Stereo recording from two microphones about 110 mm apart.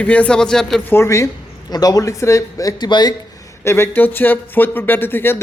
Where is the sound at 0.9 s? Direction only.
25° left (ahead or behind).